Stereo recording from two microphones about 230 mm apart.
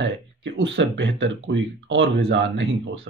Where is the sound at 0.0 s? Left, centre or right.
Right.